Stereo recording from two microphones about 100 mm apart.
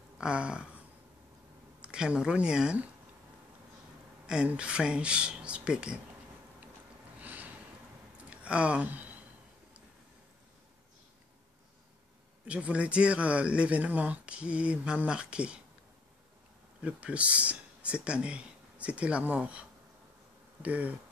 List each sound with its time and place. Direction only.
0.2 s speech: 10° right (ahead or behind)
1.8 s speech: 10° right (ahead or behind)
4.3 s speech: 10° right (ahead or behind)
7.2 s a sound: 15° right (ahead or behind)
8.3 s speech: 10° right (ahead or behind)
12.4 s speech: 10° right (ahead or behind)
16.8 s speech: 15° right (ahead or behind)
20.6 s speech: 15° right (ahead or behind)